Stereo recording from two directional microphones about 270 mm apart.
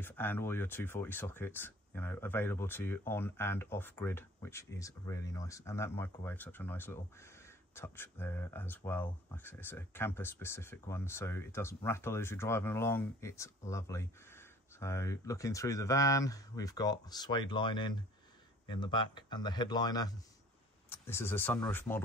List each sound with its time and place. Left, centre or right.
0.0 s speech: centre